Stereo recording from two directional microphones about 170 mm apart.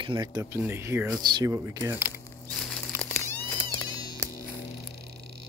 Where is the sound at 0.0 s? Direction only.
25° right (ahead or behind).